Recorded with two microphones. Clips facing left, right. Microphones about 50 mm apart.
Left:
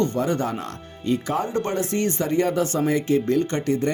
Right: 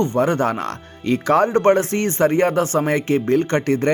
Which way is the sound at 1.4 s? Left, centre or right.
Right.